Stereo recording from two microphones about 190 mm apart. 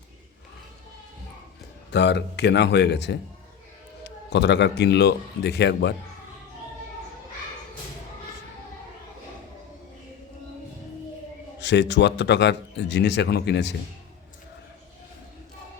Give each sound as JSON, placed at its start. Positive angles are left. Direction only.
{"t": 1.9, "sound": "speech", "side_deg": 65}
{"t": 11.6, "sound": "speech", "side_deg": 65}